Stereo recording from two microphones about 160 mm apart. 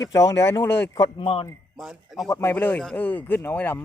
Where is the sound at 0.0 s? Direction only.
20° left (ahead or behind).